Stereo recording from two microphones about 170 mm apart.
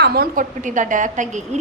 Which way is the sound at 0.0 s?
65° right (ahead or behind).